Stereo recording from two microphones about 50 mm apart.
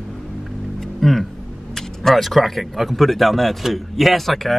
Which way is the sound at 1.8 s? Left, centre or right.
Centre.